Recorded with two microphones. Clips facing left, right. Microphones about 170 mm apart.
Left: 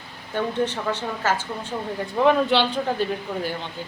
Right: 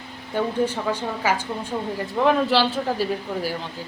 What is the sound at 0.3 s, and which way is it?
Speech, 10° right (ahead or behind).